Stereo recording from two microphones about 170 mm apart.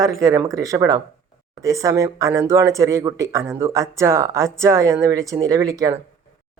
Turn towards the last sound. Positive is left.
turn(degrees=-20)  # may be behind; listen again after turning